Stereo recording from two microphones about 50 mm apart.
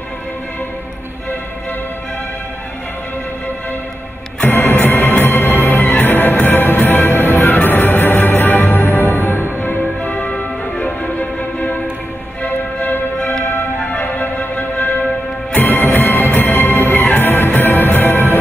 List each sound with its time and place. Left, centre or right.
4.4 s music: left
5.6 s music: left
5.9 s music: left
8.8 s music: left
9.1 s music: left
12.4 s music: left